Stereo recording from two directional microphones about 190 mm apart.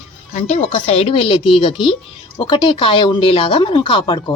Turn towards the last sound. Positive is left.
turn(degrees=25)  # may be behind; listen again after turning